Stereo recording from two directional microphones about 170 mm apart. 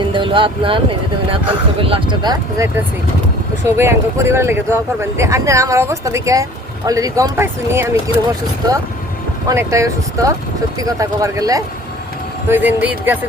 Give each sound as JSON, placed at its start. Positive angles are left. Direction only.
{"t": 0.1, "sound": "speech", "side_deg": -30}
{"t": 1.8, "sound": "speech", "side_deg": -30}
{"t": 3.8, "sound": "speech", "side_deg": -15}
{"t": 9.5, "sound": "speech", "side_deg": -20}